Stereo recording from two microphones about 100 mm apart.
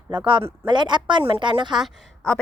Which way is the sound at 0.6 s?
50° right (ahead or behind).